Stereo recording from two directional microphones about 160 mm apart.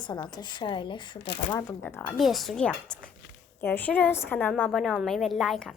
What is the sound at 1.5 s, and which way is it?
Speech, 20° left (ahead or behind).